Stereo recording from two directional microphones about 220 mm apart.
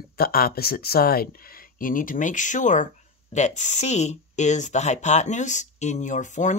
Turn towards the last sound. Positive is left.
turn(degrees=35)  # may be behind; listen again after turning